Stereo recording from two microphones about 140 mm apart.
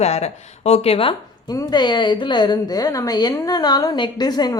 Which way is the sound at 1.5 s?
30° left (ahead or behind).